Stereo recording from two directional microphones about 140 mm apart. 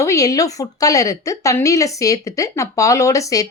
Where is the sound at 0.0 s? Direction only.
25° left (ahead or behind).